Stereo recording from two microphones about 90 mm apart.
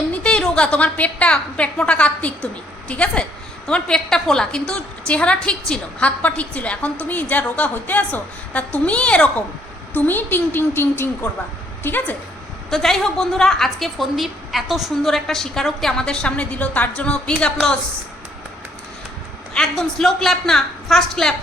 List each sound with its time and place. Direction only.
0.1 s a woman's voice: 10° left (ahead or behind)
12.7 s a woman's voice: 5° left (ahead or behind)
19.5 s a woman's voice: 5° left (ahead or behind)